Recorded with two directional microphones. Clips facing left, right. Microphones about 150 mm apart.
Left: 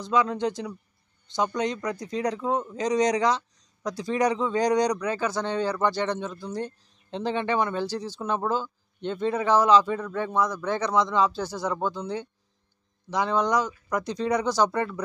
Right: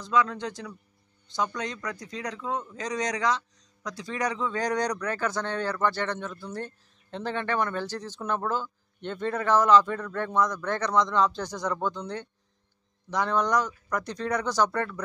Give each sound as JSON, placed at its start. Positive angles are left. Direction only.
{"t": 0.1, "sound": "speech", "side_deg": 25}